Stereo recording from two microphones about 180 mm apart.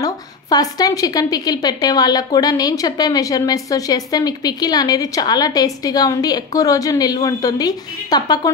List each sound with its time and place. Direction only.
0.0 s a woman's voice: 20° left (ahead or behind)